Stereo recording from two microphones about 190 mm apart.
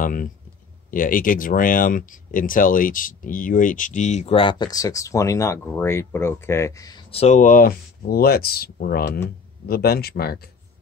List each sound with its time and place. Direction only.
0.0 s speech: 45° left (ahead or behind); by 7.0 s 15° left (ahead or behind)
7.1 s speech: 35° left (ahead or behind); by 10.4 s 55° left (ahead or behind)